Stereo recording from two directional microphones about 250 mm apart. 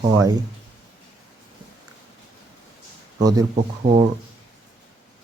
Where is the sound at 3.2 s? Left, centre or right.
Centre.